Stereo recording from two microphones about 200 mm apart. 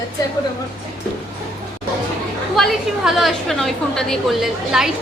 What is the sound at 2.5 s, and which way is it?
A woman's voice, centre (ahead or behind).